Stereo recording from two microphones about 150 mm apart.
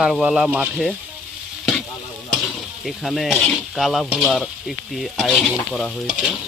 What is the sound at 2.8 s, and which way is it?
Sizzle, centre (ahead or behind).